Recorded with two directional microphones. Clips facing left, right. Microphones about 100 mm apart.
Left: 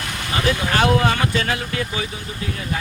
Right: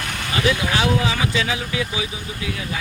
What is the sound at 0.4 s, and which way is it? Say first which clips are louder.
Speech: left 2 dB; 50° left (ahead or behind).